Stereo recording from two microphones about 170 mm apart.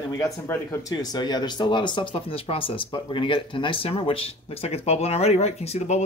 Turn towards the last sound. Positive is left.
turn(degrees=40)  # may be behind; listen again after turning